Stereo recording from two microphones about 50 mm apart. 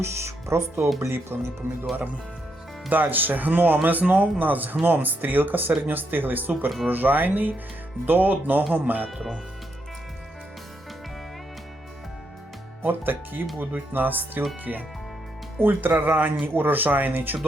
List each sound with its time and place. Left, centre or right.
0.0 s speech: right
1.1 s speech: right
2.9 s speech: right
12.8 s speech: right
14.7 s speech: right
15.6 s speech: right